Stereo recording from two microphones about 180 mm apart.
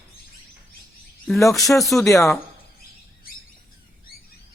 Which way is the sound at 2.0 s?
15° left (ahead or behind).